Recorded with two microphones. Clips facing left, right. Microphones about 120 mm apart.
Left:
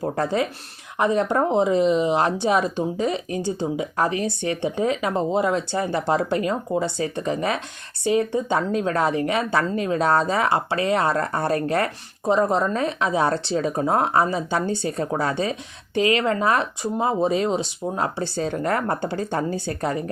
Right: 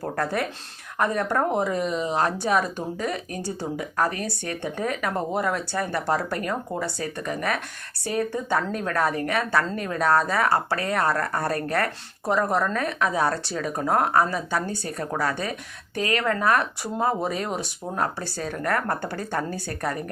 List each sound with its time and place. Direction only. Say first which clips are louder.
0.0 s speech: left 4 dB; 20° left (ahead or behind)
16.0 s speech: left 6 dB; 45° right (ahead or behind)
16.2 s speech: left 1 dB; 20° left (ahead or behind)